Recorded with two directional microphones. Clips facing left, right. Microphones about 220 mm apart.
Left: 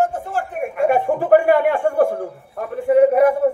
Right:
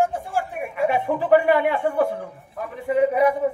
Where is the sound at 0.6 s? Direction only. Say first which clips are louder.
Left 6 dB; 50° left (ahead or behind).